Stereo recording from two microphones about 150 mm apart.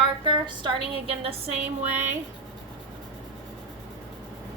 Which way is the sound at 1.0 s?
40° right (ahead or behind).